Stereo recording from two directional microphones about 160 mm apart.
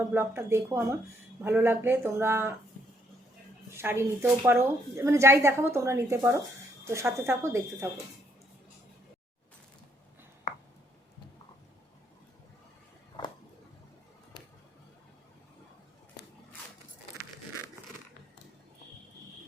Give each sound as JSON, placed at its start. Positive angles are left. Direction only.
{"t": 0.0, "sound": "a woman's voice", "side_deg": -15}
{"t": 3.7, "sound": "a woman's voice", "side_deg": -15}